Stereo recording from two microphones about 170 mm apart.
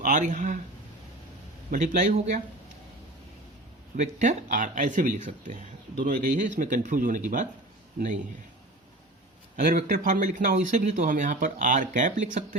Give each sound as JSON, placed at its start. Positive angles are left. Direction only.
{"t": 0.0, "sound": "speech", "side_deg": -45}
{"t": 1.7, "sound": "speech", "side_deg": -50}
{"t": 3.9, "sound": "speech", "side_deg": -45}
{"t": 9.6, "sound": "speech", "side_deg": -50}